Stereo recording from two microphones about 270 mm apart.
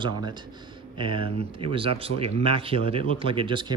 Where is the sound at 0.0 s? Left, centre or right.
Centre.